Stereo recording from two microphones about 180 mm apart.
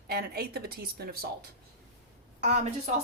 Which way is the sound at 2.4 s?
40° right (ahead or behind).